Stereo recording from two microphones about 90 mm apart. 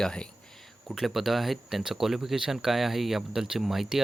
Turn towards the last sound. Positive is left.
turn(degrees=-5)  # may be behind; listen again after turning